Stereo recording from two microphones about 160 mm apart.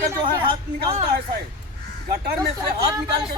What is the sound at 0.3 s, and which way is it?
Speech, 35° right (ahead or behind).